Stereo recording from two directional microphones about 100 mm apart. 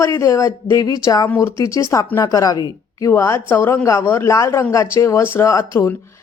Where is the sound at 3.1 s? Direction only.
20° left (ahead or behind).